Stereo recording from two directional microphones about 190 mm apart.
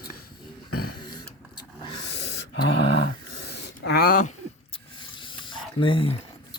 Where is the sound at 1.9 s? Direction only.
65° left (ahead or behind); by 4.3 s 45° left (ahead or behind).